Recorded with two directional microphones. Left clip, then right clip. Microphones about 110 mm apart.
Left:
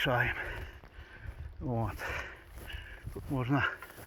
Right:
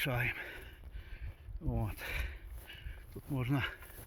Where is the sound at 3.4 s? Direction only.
25° right (ahead or behind).